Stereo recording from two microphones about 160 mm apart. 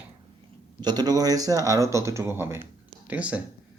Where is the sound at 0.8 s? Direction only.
25° right (ahead or behind).